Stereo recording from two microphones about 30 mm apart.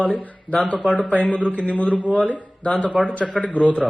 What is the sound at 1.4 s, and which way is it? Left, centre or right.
A man's voice, left.